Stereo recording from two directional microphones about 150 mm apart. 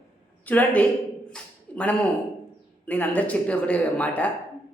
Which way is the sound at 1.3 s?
10° left (ahead or behind).